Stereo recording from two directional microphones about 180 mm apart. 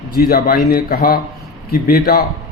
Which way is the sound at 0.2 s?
60° left (ahead or behind).